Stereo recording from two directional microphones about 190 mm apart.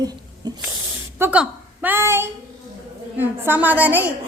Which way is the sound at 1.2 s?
10° right (ahead or behind).